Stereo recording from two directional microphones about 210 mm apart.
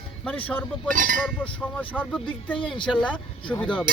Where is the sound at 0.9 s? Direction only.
40° right (ahead or behind).